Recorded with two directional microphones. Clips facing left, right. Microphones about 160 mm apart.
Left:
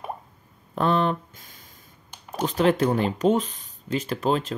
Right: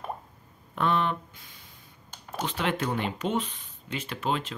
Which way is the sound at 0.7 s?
35° left (ahead or behind).